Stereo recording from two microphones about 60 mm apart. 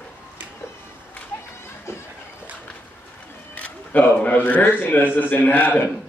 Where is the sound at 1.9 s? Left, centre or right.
Left.